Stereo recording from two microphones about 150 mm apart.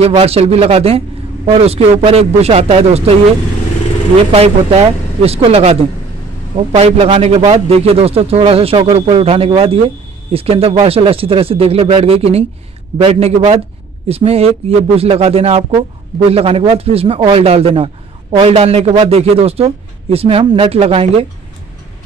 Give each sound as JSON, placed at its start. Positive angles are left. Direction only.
{"t": 0.0, "sound": "a man's voice", "side_deg": -40}
{"t": 4.3, "sound": "a man's voice", "side_deg": -40}